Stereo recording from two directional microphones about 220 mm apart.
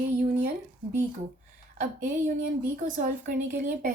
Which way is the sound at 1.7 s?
35° right (ahead or behind).